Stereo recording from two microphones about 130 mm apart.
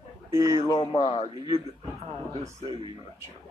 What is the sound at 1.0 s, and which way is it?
Speech, 60° left (ahead or behind).